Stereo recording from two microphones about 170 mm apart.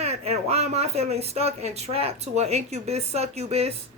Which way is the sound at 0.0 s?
40° right (ahead or behind).